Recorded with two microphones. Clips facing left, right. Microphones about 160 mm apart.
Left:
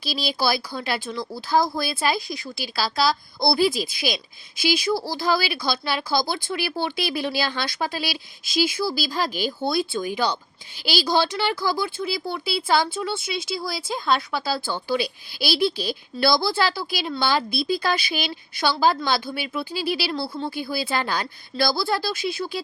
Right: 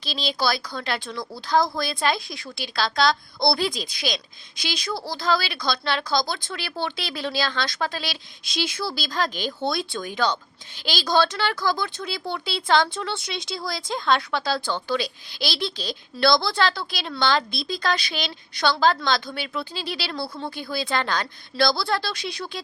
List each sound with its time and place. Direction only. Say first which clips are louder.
0.0 s speech: left 1 dB; 10° left (ahead or behind)